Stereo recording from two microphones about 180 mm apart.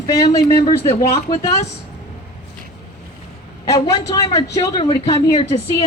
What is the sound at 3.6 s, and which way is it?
A woman's voice, 20° left (ahead or behind).